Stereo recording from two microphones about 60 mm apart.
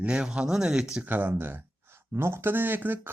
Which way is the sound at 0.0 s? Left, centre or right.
Centre.